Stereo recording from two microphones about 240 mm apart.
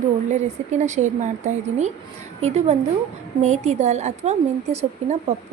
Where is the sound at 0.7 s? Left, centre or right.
Right.